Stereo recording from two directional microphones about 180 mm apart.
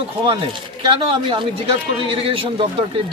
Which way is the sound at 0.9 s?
30° right (ahead or behind).